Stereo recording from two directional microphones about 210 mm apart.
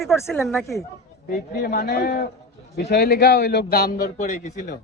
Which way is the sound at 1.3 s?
50° left (ahead or behind).